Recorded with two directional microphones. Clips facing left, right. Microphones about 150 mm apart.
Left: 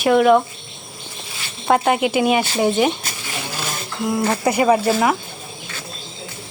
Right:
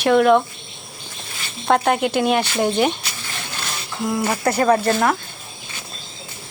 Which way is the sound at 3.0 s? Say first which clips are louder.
Left 2 dB; 45° left (ahead or behind).